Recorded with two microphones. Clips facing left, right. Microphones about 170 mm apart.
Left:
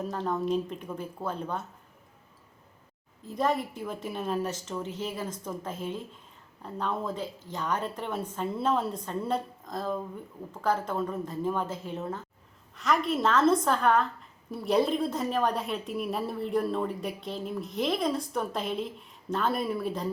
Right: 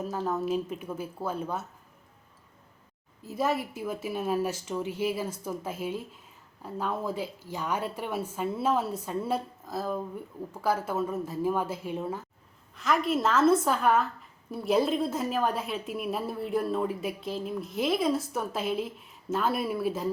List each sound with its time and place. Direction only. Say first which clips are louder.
0.0 s a woman's voice: even; 5° right (ahead or behind)
3.2 s a woman's voice: left 1 dB; 5° right (ahead or behind)